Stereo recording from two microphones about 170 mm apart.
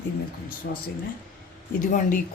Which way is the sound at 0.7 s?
75° left (ahead or behind).